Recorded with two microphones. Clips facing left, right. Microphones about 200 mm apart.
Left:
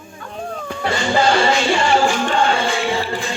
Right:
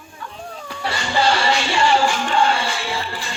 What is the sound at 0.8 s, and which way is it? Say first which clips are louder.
Music: left 3 dB; 50° left (ahead or behind).